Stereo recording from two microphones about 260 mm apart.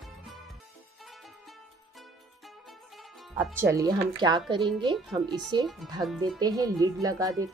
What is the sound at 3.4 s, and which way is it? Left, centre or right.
Speech, centre.